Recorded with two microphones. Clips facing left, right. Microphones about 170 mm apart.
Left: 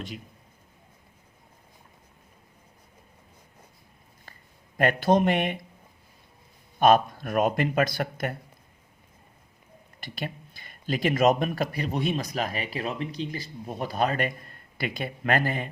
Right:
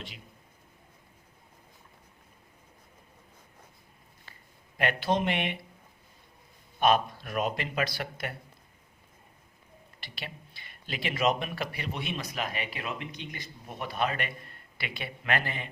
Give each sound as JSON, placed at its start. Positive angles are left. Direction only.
{"t": 4.8, "sound": "speech", "side_deg": 45}
{"t": 6.7, "sound": "speech", "side_deg": 45}
{"t": 10.0, "sound": "speech", "side_deg": 45}